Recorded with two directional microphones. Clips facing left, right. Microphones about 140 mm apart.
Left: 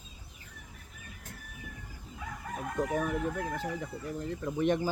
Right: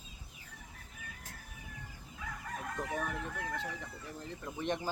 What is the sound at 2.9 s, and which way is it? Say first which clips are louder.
Speech: left 7 dB; 10° left (ahead or behind).